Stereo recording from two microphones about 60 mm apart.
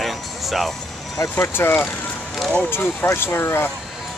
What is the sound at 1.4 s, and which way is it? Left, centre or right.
Speech, left.